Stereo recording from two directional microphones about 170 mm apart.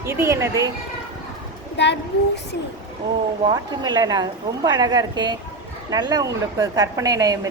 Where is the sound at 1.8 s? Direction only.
90° left.